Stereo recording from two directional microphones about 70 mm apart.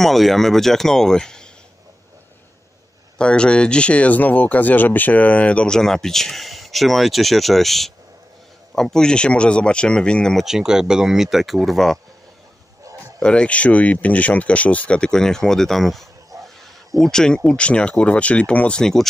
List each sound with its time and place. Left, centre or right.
0.0 s speech: centre
3.2 s speech: centre
10.3 s speech: centre
12.8 s a sound: right
13.2 s speech: centre
18.8 s speech: centre